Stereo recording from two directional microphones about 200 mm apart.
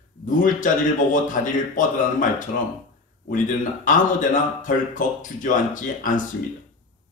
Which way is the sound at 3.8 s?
40° left (ahead or behind).